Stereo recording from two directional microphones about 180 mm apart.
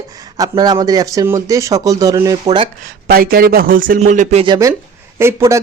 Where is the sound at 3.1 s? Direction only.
55° right (ahead or behind).